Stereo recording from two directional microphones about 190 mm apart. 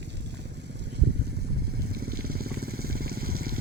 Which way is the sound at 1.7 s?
55° right (ahead or behind).